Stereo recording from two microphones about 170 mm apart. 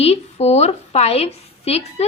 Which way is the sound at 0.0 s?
40° left (ahead or behind).